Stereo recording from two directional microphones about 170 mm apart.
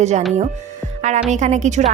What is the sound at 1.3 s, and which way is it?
Speech, 45° right (ahead or behind).